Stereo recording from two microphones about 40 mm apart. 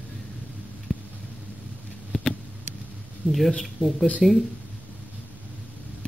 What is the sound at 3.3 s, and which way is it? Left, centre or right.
Speech, centre.